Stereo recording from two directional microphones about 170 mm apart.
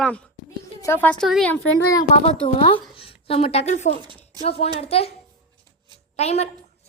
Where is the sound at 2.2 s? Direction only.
35° left (ahead or behind).